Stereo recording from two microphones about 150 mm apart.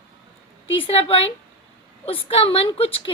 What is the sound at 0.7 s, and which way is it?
Speech, 40° left (ahead or behind).